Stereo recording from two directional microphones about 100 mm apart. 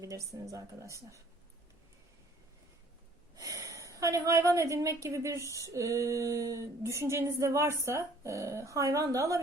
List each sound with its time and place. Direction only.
0.0 s a woman's voice: 30° right (ahead or behind)
3.3 s a woman's voice: 35° right (ahead or behind)